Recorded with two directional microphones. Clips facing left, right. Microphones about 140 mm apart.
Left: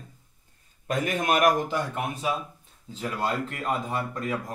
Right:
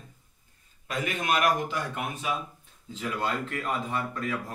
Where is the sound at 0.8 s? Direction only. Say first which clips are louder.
Left 4 dB; 45° left (ahead or behind).